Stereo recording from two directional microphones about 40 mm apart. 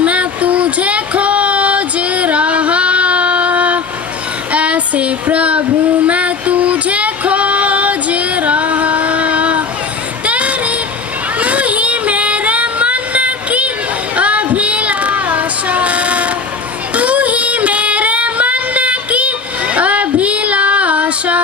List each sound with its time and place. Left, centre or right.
0.0 s a sound: right
6.1 s music: right
11.3 s child singing: right
16.9 s female singing: right